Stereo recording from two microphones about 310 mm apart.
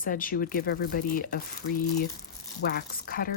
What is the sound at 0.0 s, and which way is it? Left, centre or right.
Speech, left.